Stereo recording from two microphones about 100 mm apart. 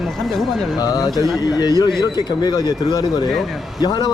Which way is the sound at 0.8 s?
40° left (ahead or behind).